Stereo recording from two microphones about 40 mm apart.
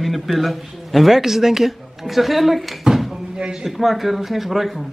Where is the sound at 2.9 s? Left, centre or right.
Centre.